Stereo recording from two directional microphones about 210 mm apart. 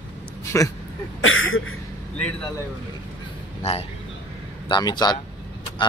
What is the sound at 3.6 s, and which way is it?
Speech, 30° left (ahead or behind).